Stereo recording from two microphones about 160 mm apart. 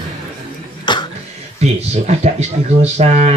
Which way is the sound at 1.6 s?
45° right (ahead or behind).